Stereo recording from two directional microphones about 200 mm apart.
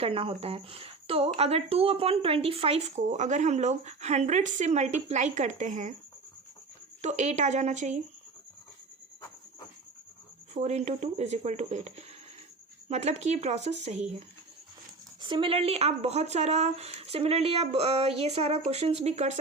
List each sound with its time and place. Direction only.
0.0 s speech: 25° right (ahead or behind)
7.0 s speech: 35° right (ahead or behind)
10.5 s speech: 35° right (ahead or behind)